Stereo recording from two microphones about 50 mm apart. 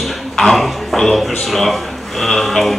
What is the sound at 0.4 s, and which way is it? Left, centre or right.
Speech, centre.